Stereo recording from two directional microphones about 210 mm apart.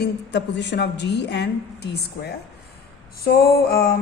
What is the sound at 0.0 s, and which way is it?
A woman's voice, 55° left (ahead or behind).